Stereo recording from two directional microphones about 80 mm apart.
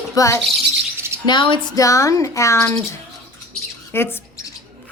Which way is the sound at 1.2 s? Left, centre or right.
Left.